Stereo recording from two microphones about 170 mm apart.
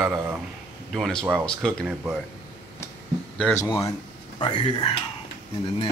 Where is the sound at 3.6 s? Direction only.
15° left (ahead or behind).